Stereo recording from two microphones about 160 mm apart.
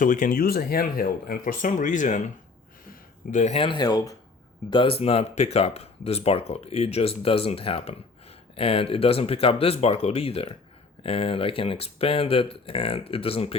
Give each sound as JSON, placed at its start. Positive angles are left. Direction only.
{"t": 0.0, "sound": "speech", "side_deg": 55}
{"t": 4.7, "sound": "speech", "side_deg": 35}